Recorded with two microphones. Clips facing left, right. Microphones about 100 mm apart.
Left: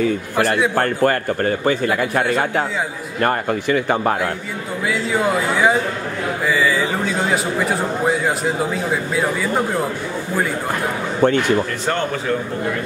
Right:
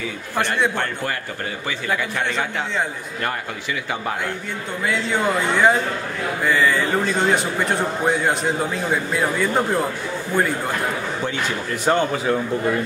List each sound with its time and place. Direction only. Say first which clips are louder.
0.7 s a man's voice: left 8 dB; 50° left (ahead or behind)
4.8 s a man's voice: left 2 dB; 5° left (ahead or behind)